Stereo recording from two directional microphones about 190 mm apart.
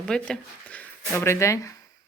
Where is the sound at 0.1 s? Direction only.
5° left (ahead or behind).